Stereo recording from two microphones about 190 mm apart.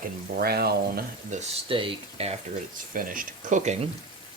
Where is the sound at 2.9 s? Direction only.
45° right (ahead or behind).